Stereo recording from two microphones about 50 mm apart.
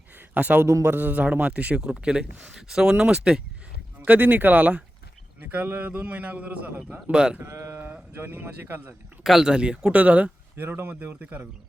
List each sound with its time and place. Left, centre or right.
0.3 s a man's voice: right
4.0 s a man's voice: right
7.1 s speech: centre
7.4 s speech: right
8.1 s a man's voice: right
9.2 s speech: centre
9.5 s speech: centre
9.9 s a man's voice: right
10.6 s a man's voice: right